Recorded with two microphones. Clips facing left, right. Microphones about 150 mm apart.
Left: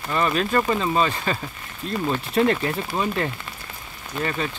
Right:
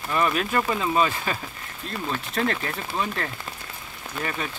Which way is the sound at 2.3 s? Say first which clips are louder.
Left 7 dB; 5° left (ahead or behind).